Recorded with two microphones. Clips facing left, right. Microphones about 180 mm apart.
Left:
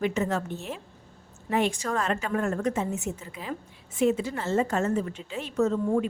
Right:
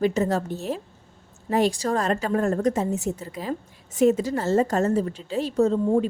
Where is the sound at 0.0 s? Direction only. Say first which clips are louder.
Right 4 dB; 35° right (ahead or behind).